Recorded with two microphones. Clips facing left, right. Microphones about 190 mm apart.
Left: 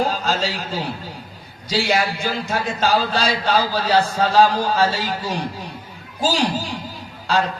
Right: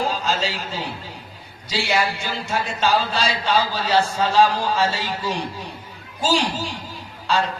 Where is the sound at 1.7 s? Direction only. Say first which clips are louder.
Left 2 dB; 40° left (ahead or behind).